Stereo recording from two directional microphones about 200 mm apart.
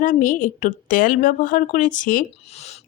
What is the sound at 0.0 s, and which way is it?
A woman's voice, 40° left (ahead or behind).